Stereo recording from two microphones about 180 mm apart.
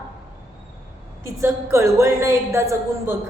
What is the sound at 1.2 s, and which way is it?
A woman's voice, 15° right (ahead or behind).